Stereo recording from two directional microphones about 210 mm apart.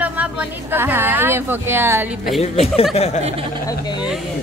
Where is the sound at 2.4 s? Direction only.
30° left (ahead or behind).